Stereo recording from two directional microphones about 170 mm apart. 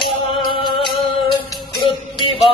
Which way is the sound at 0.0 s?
25° left (ahead or behind).